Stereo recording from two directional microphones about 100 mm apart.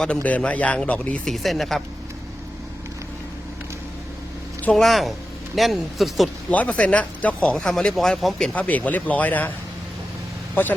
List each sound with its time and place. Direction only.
0.2 s speech: 15° left (ahead or behind)
4.7 s speech: centre (ahead or behind)
6.5 s speech: 15° left (ahead or behind)
7.5 s speech: 5° left (ahead or behind)
8.5 s speech: 15° left (ahead or behind)
10.5 s speech: 20° left (ahead or behind)